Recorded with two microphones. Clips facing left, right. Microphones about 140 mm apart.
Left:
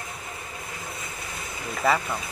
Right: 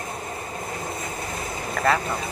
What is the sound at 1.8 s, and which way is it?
Vehicle, 50° right (ahead or behind).